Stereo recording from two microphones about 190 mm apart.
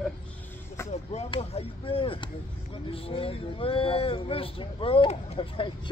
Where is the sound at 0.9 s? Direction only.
35° left (ahead or behind).